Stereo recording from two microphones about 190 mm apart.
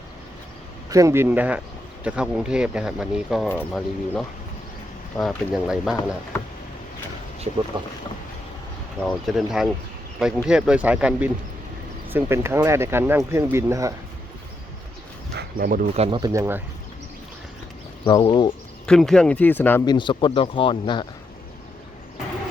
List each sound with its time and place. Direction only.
0.9 s speech: 15° right (ahead or behind)
7.5 s speech: 35° right (ahead or behind)
9.0 s speech: centre (ahead or behind)
15.4 s speech: 50° right (ahead or behind)
16.0 s speech: 25° right (ahead or behind)
18.0 s speech: 25° left (ahead or behind)
18.9 s speech: 5° left (ahead or behind)
19.8 s speech: 25° left (ahead or behind)